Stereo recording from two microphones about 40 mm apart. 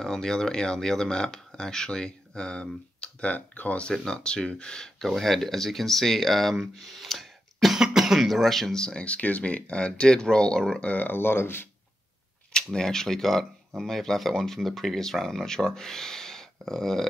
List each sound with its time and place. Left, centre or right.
0.0 s speech: centre
3.3 s speech: left
4.0 s speech: left
5.0 s speech: centre
8.7 s speech: centre
9.0 s speech: left; by 10.8 s centre
10.8 s speech: left
11.1 s speech: left
12.7 s speech: centre